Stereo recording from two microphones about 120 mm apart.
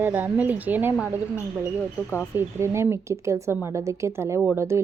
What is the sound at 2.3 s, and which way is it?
A woman's voice, 20° right (ahead or behind).